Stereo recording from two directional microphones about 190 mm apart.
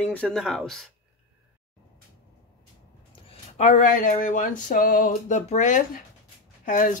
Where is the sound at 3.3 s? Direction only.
40° left (ahead or behind).